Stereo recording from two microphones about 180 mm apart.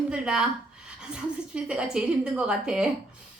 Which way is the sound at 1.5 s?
5° right (ahead or behind).